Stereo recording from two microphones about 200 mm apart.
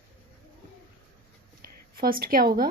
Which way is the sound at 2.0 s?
45° right (ahead or behind).